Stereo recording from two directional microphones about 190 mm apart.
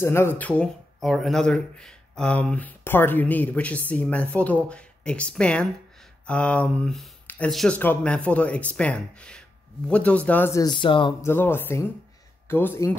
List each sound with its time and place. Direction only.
0.0 s speech: 10° left (ahead or behind)
11.2 s speech: 10° left (ahead or behind)